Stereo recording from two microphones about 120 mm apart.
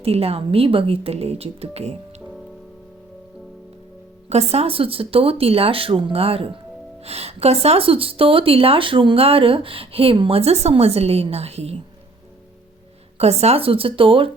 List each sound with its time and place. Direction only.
0.0 s a woman's voice: 55° right (ahead or behind)
4.3 s speech: 60° right (ahead or behind)
13.1 s speech: 60° right (ahead or behind)